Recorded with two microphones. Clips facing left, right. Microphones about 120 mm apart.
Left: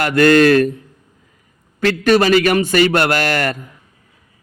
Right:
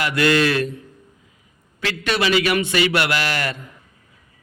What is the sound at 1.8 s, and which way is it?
A man's voice, 45° left (ahead or behind).